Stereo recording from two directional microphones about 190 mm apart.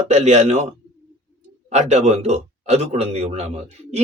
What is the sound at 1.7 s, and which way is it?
Speech, 35° right (ahead or behind).